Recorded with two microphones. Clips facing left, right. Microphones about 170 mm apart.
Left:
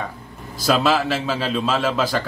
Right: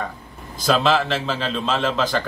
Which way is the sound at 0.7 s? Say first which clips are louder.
Even; 5° left (ahead or behind).